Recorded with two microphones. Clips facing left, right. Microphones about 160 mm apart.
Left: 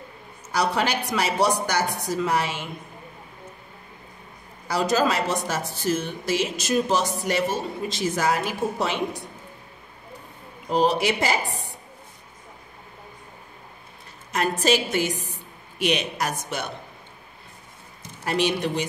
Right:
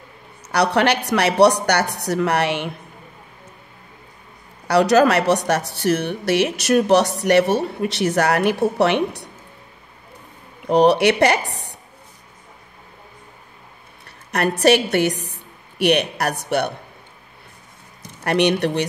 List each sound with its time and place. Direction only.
0.5 s speech: 70° right (ahead or behind)
4.6 s speech: 70° right (ahead or behind)
10.7 s speech: 70° right (ahead or behind)
14.0 s a woman's voice: 70° right (ahead or behind)
18.2 s speech: 65° right (ahead or behind)